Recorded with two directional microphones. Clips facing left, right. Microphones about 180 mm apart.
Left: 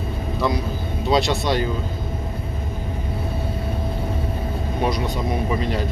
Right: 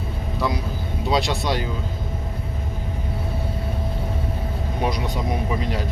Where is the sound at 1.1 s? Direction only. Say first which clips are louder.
Left 3 dB; 10° right (ahead or behind).